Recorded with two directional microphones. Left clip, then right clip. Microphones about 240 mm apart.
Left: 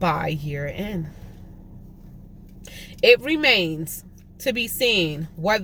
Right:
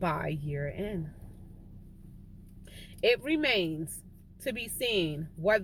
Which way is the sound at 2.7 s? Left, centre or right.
Centre.